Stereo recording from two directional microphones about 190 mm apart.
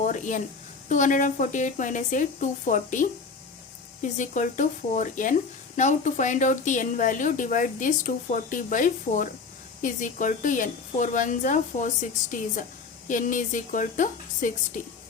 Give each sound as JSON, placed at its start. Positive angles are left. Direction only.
{"t": 0.0, "sound": "a woman's voice", "side_deg": 40}